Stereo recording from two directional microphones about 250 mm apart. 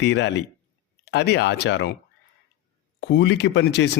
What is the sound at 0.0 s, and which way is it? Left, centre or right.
Speech, left.